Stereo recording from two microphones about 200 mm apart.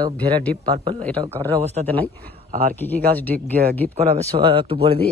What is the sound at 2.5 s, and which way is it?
Speech, 40° right (ahead or behind).